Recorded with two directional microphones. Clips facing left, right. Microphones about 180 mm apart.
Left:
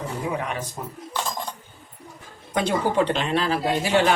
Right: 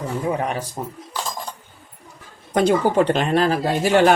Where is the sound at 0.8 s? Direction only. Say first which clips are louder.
Right 4 dB; 35° right (ahead or behind).